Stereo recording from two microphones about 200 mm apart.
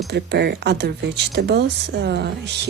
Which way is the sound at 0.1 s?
55° right (ahead or behind).